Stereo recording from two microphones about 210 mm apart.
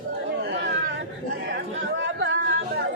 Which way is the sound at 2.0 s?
60° right (ahead or behind).